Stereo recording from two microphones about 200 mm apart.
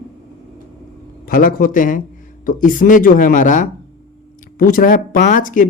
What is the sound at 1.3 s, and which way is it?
Speech, 45° left (ahead or behind).